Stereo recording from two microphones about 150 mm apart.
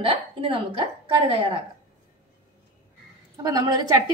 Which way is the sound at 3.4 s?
25° right (ahead or behind).